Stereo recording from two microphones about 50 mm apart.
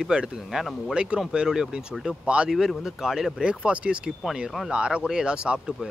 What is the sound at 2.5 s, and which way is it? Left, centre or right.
Speech, centre.